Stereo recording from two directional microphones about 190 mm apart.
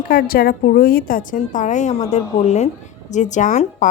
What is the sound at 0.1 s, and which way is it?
A woman's voice, 50° left (ahead or behind).